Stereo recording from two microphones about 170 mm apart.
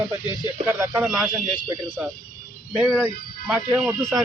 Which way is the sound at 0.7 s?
10° right (ahead or behind).